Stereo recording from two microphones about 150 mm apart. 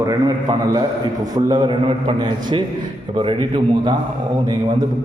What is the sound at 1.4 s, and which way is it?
A man's voice, 30° right (ahead or behind).